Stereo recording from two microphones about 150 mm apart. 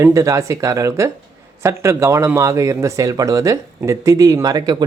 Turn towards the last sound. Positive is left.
turn(degrees=-25)  # may be behind; listen again after turning